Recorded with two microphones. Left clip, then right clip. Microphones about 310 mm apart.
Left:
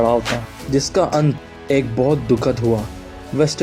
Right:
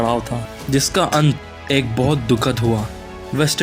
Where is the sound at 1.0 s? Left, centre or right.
Right.